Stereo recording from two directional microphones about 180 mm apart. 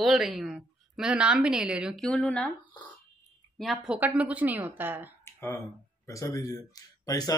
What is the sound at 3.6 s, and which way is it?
A woman's voice, centre (ahead or behind).